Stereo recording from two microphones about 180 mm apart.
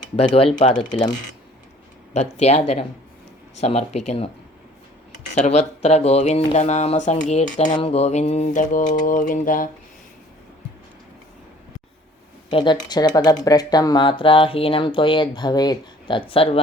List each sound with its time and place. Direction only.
0.0 s speech: 45° left (ahead or behind)
2.1 s speech: 35° left (ahead or behind)
5.3 s speech: 40° left (ahead or behind)
9.0 s mantra: 45° left (ahead or behind)
12.5 s speech: 25° left (ahead or behind)